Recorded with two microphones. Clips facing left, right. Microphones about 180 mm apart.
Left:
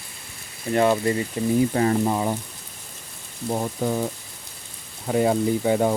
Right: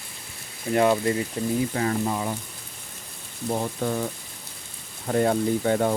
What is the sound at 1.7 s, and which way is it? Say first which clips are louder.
Speech: left 4 dB; 35° left (ahead or behind).